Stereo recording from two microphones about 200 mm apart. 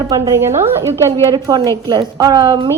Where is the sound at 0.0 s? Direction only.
15° right (ahead or behind).